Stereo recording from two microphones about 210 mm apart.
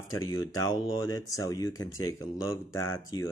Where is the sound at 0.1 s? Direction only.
20° left (ahead or behind).